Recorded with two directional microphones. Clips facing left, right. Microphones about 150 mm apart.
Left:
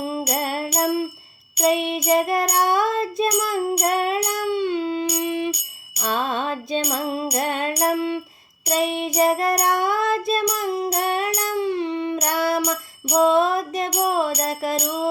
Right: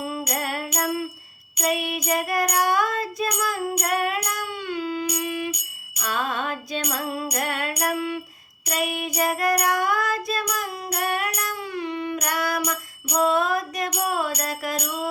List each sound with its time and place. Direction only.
0.0 s music: 30° left (ahead or behind)